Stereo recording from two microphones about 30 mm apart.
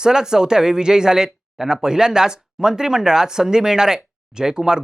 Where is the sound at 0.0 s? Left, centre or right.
Right.